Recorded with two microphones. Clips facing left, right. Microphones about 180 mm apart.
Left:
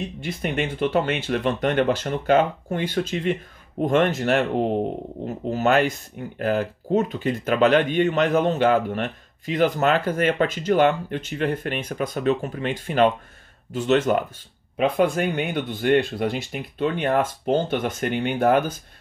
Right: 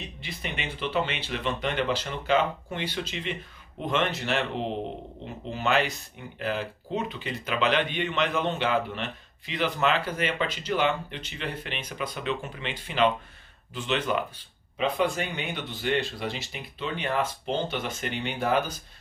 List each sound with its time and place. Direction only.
0.0 s speech: 45° left (ahead or behind)